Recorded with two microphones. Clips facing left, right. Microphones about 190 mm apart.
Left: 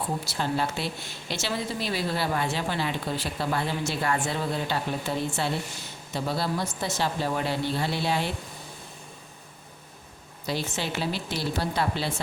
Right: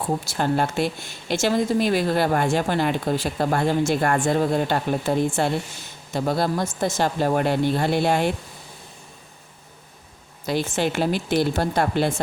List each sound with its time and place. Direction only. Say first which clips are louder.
0.3 s a woman's voice: right 6 dB; 50° right (ahead or behind)
10.4 s a woman's voice: right 7 dB; 50° right (ahead or behind)